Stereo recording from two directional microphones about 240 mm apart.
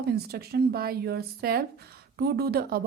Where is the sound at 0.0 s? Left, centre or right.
Right.